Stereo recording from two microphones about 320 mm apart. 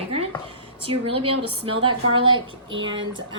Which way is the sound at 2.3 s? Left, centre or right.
Right.